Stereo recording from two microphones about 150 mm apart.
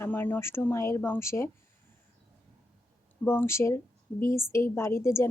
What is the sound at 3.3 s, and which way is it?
A woman's voice, 15° left (ahead or behind).